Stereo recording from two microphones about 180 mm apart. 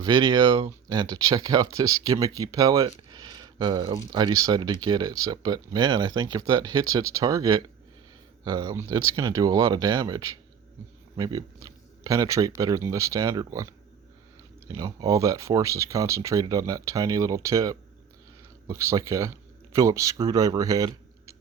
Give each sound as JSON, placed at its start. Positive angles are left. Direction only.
{"t": 0.0, "sound": "speech", "side_deg": -25}
{"t": 14.7, "sound": "speech", "side_deg": -20}